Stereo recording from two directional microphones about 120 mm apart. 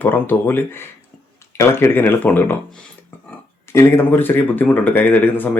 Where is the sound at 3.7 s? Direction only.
20° left (ahead or behind).